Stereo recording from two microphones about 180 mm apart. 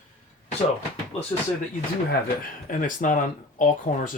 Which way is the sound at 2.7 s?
50° left (ahead or behind).